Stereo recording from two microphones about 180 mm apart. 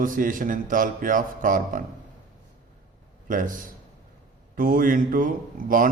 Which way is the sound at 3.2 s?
45° right (ahead or behind).